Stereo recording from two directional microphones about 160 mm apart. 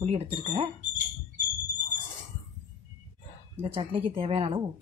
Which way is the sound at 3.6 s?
35° right (ahead or behind).